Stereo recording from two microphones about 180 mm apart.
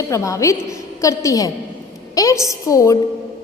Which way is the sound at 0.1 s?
15° left (ahead or behind).